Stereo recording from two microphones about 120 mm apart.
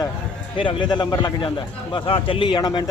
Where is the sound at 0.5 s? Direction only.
45° left (ahead or behind).